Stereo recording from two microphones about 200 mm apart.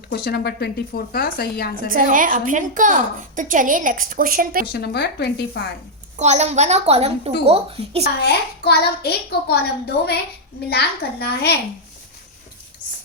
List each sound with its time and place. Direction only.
0.1 s a child's voice: 50° left (ahead or behind)
1.9 s a woman's voice: 45° right (ahead or behind)
4.6 s a child's voice: 55° left (ahead or behind)
6.1 s a woman's voice: 35° right (ahead or behind)
8.2 s a child's voice: 55° left (ahead or behind)